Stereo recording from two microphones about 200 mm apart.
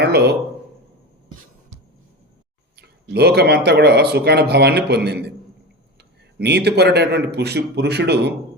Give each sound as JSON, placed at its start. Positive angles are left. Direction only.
{"t": 0.0, "sound": "speech", "side_deg": -55}
{"t": 2.7, "sound": "speech", "side_deg": -55}
{"t": 6.4, "sound": "speech", "side_deg": -55}